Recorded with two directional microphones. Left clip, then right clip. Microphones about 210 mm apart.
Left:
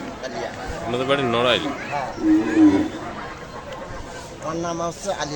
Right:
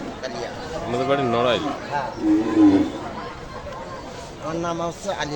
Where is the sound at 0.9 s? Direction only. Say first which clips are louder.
Even; 5° right (ahead or behind).